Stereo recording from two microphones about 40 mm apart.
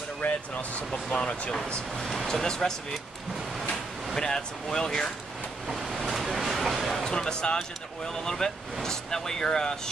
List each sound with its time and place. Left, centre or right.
0.2 s speech: left
1.1 s speech: left
2.0 s speech: centre
2.2 s speech: centre
4.2 s speech: centre
5.7 s waves: centre
7.1 s speech: centre